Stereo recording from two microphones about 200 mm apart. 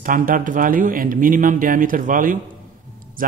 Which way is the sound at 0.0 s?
45° right (ahead or behind).